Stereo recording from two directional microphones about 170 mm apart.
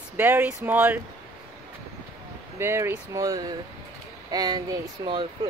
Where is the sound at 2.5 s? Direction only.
15° right (ahead or behind).